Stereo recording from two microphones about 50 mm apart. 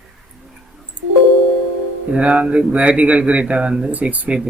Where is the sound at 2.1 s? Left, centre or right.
Right.